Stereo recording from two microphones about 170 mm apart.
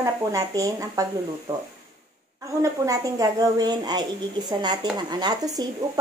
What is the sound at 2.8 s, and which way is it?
Speech, 20° right (ahead or behind).